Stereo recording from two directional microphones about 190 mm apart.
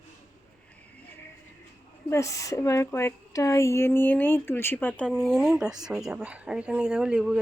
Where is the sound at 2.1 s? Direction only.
15° left (ahead or behind).